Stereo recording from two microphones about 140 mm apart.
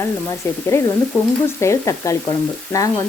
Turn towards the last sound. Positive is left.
turn(degrees=25)  # may be behind; listen again after turning